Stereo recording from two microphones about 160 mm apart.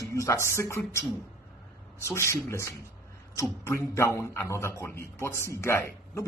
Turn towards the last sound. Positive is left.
turn(degrees=15)  # may be behind; listen again after turning